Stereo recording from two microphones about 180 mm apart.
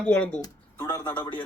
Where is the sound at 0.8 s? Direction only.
20° left (ahead or behind).